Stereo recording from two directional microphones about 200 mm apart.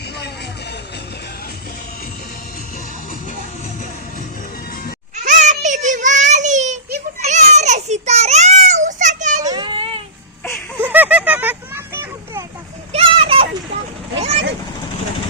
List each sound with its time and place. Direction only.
5.1 s child singing: 40° right (ahead or behind)
7.2 s children playing: 35° right (ahead or behind)
9.4 s baby cry: 20° right (ahead or behind)
10.8 s a sound: 10° right (ahead or behind)
12.9 s a sound: 25° right (ahead or behind)
14.2 s boat: 30° right (ahead or behind)